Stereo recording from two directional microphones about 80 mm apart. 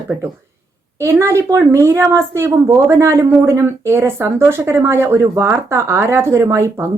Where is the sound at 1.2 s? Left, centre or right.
Right.